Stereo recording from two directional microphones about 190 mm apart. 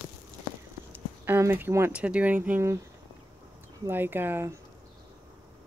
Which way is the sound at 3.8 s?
10° right (ahead or behind).